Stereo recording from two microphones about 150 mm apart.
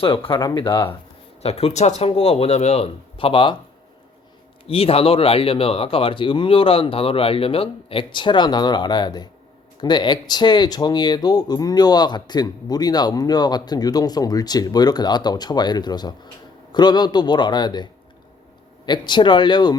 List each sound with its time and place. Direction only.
0.0 s speech: 35° left (ahead or behind)
4.7 s speech: 40° left (ahead or behind)
18.9 s speech: 30° left (ahead or behind)